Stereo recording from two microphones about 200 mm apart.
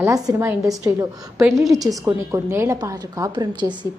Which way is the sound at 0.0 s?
15° right (ahead or behind).